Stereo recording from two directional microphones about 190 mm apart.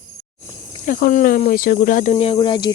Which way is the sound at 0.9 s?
50° left (ahead or behind).